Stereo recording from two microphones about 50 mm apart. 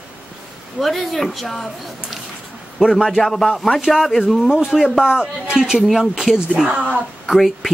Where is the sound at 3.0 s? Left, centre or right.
Centre.